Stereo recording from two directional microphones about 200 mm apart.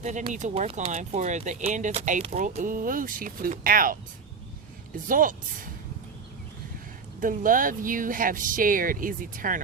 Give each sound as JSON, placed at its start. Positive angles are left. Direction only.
{"t": 0.0, "sound": "speech", "side_deg": -35}
{"t": 2.6, "sound": "speech", "side_deg": -45}
{"t": 5.0, "sound": "speech", "side_deg": -45}
{"t": 7.2, "sound": "speech", "side_deg": -45}